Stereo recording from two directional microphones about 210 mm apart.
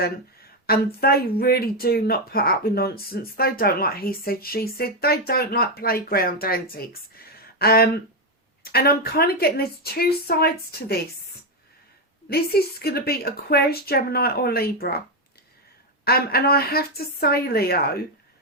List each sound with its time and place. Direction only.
0.7 s speech: 45° left (ahead or behind)
12.3 s speech: 50° left (ahead or behind)
16.0 s speech: 45° left (ahead or behind)